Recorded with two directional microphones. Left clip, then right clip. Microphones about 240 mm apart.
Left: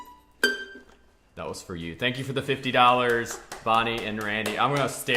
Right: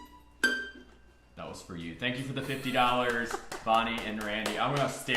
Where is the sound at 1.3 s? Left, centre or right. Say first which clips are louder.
Left 7 dB; left.